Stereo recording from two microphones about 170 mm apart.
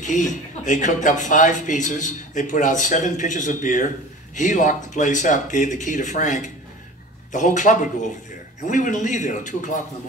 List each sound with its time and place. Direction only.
0.0 s speech: 45° left (ahead or behind)